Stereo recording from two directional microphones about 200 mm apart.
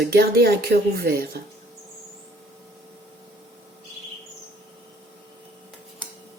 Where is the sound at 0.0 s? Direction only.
50° right (ahead or behind).